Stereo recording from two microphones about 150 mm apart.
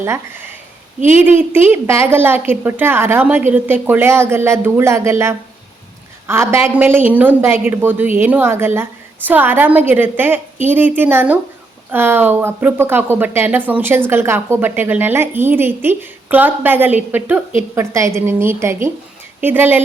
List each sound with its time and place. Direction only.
1.1 s speech: 15° right (ahead or behind)